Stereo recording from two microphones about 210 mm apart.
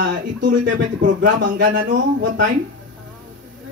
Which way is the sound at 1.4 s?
40° right (ahead or behind).